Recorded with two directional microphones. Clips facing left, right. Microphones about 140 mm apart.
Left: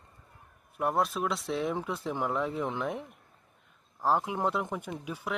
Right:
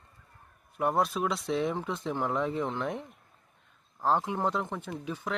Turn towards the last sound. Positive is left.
turn(degrees=10)  # may be behind; listen again after turning